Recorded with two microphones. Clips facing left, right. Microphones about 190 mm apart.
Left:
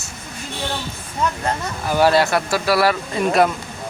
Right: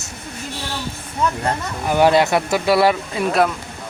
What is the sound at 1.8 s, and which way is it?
Speech, 20° right (ahead or behind).